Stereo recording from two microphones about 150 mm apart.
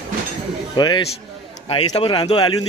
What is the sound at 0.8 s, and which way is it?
Speech, 30° left (ahead or behind).